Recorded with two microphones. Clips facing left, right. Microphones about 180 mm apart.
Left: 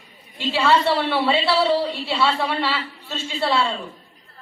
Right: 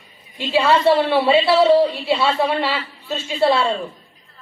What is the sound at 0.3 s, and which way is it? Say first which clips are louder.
A woman's voice: right 2 dB; 20° right (ahead or behind).